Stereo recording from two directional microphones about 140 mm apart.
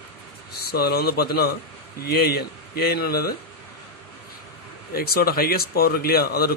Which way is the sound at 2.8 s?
90° left.